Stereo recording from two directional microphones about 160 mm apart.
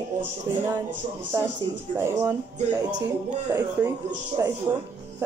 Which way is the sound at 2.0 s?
15° right (ahead or behind).